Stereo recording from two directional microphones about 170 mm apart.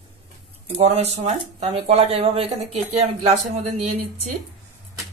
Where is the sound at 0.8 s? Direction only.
40° right (ahead or behind).